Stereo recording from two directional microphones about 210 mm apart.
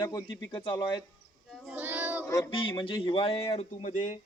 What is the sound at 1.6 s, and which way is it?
Child singing, 10° right (ahead or behind).